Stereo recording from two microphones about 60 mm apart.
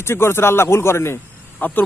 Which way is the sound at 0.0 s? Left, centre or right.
Left.